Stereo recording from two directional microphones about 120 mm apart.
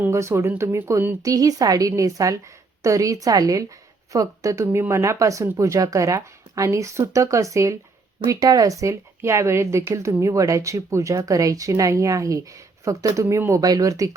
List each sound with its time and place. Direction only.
0.0 s speech: 25° right (ahead or behind)